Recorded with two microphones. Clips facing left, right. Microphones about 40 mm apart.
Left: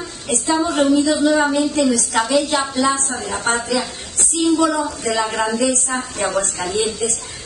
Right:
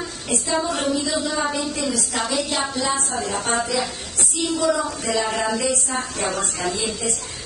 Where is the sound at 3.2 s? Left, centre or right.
Left.